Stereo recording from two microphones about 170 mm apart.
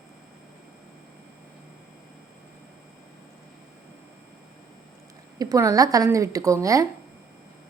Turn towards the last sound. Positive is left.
turn(degrees=-20)  # may be behind; listen again after turning